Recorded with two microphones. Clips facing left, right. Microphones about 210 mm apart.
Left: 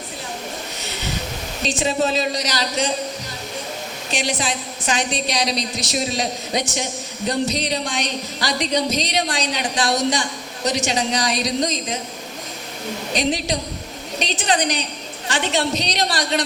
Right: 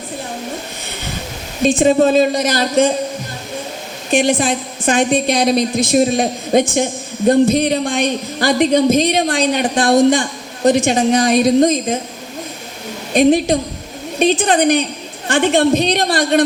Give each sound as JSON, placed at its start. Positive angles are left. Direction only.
{"t": 1.6, "sound": "a woman's voice", "side_deg": -55}
{"t": 4.1, "sound": "a woman's voice", "side_deg": -55}
{"t": 13.1, "sound": "a woman's voice", "side_deg": -55}